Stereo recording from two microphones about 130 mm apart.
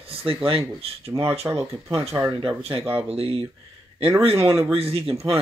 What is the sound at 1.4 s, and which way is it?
Speech, 20° right (ahead or behind).